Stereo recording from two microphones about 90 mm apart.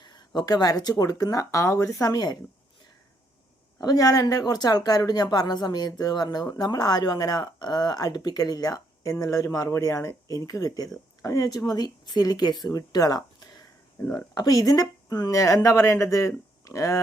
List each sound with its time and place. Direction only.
0.0 s speech: 50° left (ahead or behind); by 1.9 s 35° left (ahead or behind)
2.0 s speech: 50° left (ahead or behind)
3.8 s speech: 45° left (ahead or behind)